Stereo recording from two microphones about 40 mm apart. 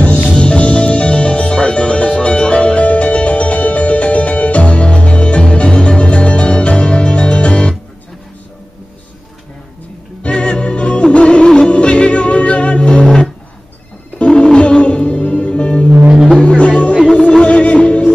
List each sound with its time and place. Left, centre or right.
0.3 s music: left
10.2 s music: left
16.1 s music: right
16.3 s music: left
17.1 s music: centre